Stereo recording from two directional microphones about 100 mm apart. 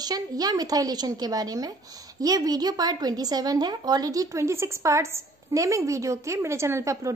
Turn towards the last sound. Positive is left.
turn(degrees=-30)  # may be behind; listen again after turning